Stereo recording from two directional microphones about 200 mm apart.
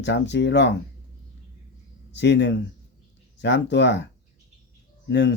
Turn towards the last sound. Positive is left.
turn(degrees=60)  # may be behind; listen again after turning